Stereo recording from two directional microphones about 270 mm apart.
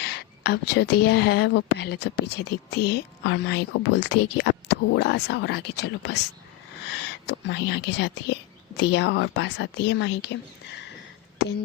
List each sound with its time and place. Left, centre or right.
0.0 s speech: left
6.9 s a sound: left
7.9 s speech: left